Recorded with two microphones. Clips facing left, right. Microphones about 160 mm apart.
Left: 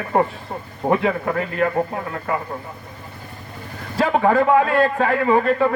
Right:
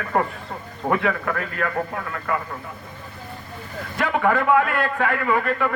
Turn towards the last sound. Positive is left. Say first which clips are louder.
# left 5 dB
turn(degrees=30)  # may be behind; listen again after turning